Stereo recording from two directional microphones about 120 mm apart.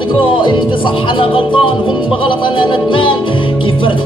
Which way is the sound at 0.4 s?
40° left (ahead or behind).